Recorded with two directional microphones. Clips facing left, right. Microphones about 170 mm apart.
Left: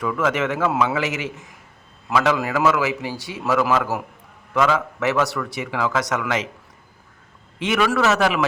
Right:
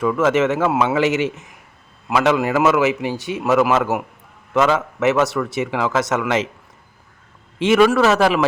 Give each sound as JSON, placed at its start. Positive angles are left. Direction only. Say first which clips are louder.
{"t": 0.0, "sound": "a man's voice", "louder": "right 5 dB", "side_deg": -25}
{"t": 7.6, "sound": "a man's voice", "louder": "right 6 dB", "side_deg": -25}